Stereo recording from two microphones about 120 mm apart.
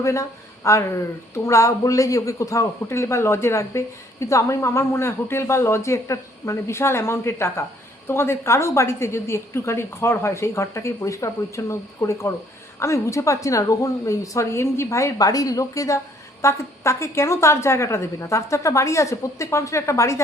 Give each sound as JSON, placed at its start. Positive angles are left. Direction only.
{"t": 0.0, "sound": "a man's voice", "side_deg": 25}